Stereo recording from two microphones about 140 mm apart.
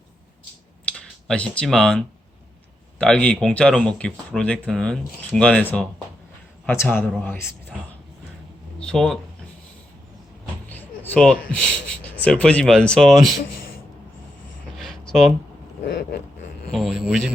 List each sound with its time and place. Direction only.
0.9 s speech: 10° left (ahead or behind)
8.8 s a sound: 5° left (ahead or behind)
10.7 s vehicle: 10° left (ahead or behind)
11.2 s speech: 5° left (ahead or behind)
14.8 s a sound: centre (ahead or behind)
16.7 s a man's voice: centre (ahead or behind)